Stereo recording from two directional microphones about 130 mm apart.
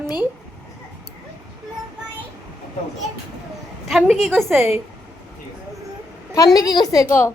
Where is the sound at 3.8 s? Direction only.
Centre (ahead or behind).